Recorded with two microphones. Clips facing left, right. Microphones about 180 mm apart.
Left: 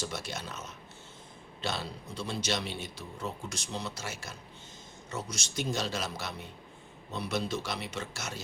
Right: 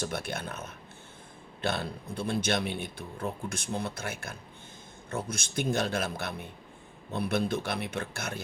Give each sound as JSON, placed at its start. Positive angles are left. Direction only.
{"t": 0.0, "sound": "a man's voice", "side_deg": -55}